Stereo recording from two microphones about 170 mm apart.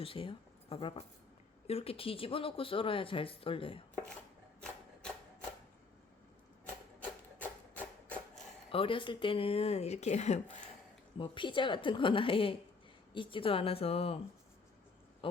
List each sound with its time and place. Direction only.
0.0 s speech: 30° left (ahead or behind)
7.0 s music: 10° left (ahead or behind)
8.7 s speech: 30° left (ahead or behind)
11.2 s a woman's voice: 30° left (ahead or behind)
15.2 s speech: 30° left (ahead or behind)